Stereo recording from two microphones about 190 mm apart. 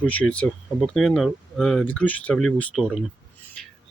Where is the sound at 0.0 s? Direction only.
5° left (ahead or behind).